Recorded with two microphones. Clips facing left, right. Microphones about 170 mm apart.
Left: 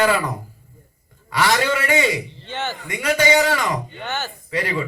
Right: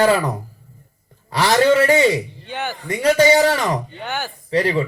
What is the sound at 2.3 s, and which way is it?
Speech, 10° right (ahead or behind).